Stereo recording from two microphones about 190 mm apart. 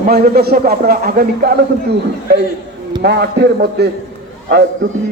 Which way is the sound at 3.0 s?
60° right (ahead or behind).